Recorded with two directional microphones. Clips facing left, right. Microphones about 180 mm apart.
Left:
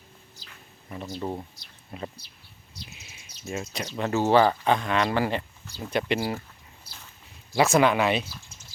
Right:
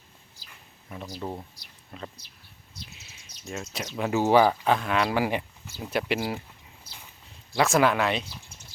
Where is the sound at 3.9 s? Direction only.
10° right (ahead or behind).